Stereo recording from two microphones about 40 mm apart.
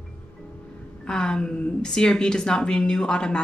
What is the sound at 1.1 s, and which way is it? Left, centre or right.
A woman's voice, left.